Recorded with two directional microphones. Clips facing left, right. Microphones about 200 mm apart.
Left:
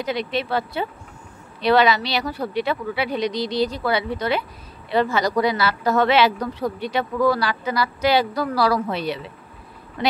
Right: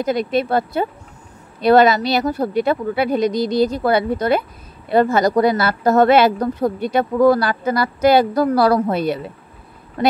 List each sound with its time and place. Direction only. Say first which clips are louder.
0.0 s speech: right 6 dB; 45° right (ahead or behind)